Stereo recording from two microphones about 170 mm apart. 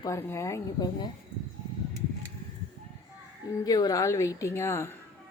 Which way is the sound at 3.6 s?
20° left (ahead or behind).